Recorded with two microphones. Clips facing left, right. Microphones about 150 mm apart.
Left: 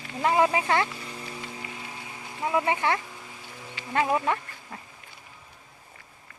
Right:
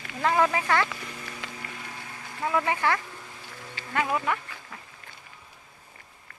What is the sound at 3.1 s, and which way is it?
Music, 5° left (ahead or behind).